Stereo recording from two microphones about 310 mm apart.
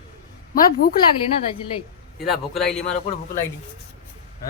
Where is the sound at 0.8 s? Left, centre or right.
Left.